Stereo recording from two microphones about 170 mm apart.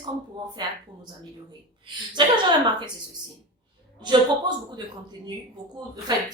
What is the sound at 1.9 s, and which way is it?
A woman's voice, 25° right (ahead or behind).